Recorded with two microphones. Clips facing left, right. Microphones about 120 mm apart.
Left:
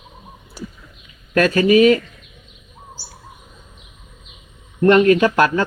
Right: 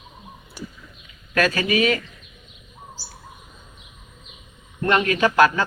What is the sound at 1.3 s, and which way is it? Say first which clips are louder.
Speech: left 7 dB; 35° left (ahead or behind).